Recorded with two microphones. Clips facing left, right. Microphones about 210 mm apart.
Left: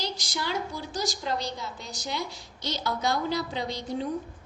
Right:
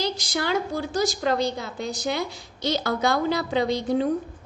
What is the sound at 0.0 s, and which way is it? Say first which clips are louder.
A woman's voice: right 6 dB; 60° right (ahead or behind).